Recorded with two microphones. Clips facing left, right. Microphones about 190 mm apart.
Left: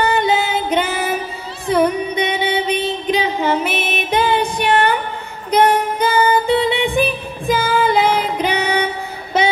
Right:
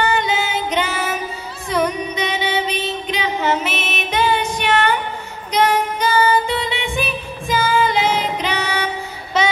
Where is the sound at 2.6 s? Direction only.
55° left (ahead or behind).